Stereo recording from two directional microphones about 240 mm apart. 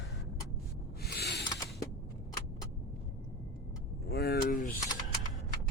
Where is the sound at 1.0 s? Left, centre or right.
Left.